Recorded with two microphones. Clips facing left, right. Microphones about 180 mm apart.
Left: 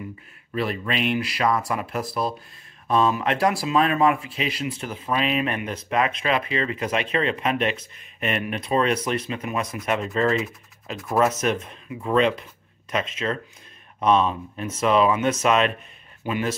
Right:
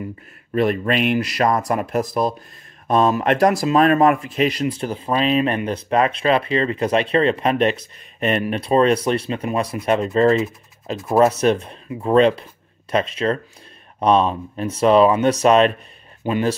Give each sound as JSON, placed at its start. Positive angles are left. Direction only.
{"t": 0.5, "sound": "speech", "side_deg": -50}